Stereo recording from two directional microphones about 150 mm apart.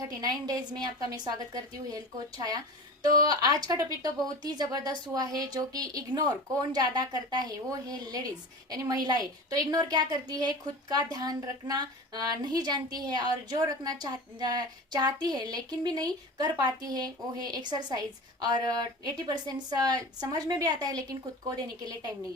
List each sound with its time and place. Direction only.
0.0 s a woman's voice: 25° right (ahead or behind)